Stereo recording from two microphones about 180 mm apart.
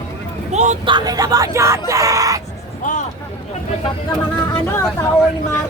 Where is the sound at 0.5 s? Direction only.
40° right (ahead or behind).